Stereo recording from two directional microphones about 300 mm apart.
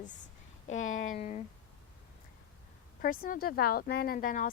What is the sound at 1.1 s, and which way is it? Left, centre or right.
Speech, left.